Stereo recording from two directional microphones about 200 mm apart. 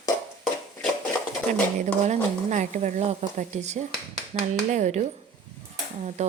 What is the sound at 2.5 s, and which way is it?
A woman's voice, 35° right (ahead or behind).